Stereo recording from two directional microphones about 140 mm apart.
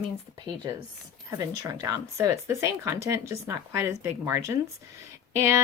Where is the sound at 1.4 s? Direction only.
25° right (ahead or behind).